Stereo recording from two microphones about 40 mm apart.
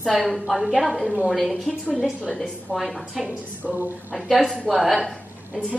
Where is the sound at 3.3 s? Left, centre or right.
Right.